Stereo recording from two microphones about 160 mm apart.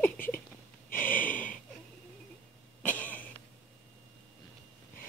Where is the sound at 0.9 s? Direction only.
10° left (ahead or behind).